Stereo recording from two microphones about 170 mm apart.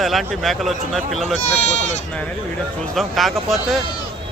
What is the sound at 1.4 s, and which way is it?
Speech, 40° left (ahead or behind).